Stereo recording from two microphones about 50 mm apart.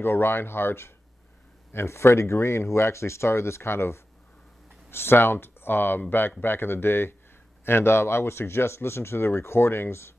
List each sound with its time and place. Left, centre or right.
0.0 s speech: left